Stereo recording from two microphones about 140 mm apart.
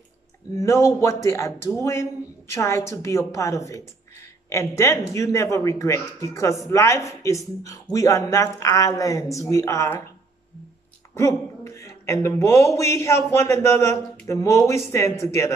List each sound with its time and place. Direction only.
0.6 s speech: 20° left (ahead or behind)
11.1 s speech: 20° left (ahead or behind)